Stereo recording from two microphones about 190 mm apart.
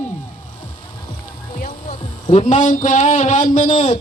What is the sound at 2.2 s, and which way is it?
A man's voice, 40° left (ahead or behind).